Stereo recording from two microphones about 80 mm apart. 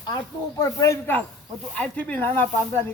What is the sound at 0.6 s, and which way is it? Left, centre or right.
Speech, left.